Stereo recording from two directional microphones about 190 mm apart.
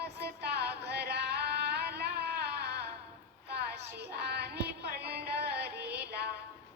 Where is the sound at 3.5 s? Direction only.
60° right (ahead or behind).